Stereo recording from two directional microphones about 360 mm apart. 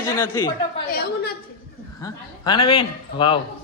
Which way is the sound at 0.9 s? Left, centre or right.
Left.